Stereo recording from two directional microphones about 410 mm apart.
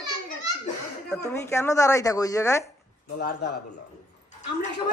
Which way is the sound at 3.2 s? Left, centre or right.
Left.